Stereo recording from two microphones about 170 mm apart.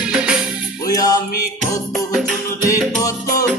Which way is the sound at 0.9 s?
20° left (ahead or behind).